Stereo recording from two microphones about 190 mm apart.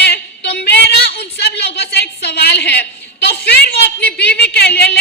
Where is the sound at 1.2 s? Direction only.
60° left (ahead or behind).